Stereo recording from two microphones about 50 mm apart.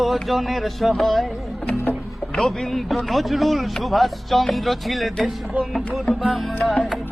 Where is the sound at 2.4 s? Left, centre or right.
Centre.